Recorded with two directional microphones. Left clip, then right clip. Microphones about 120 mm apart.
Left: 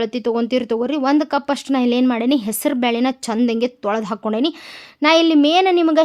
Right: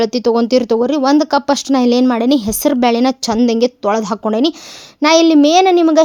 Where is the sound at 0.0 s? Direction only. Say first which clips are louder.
Right 6 dB; 45° right (ahead or behind).